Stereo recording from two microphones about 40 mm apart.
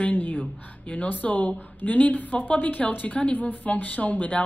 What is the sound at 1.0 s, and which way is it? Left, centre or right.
A woman's voice, left.